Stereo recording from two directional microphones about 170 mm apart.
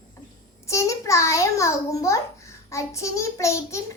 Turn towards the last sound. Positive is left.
turn(degrees=15)  # may be behind; listen again after turning